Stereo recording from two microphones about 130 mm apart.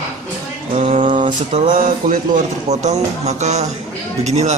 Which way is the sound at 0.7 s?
60° right (ahead or behind).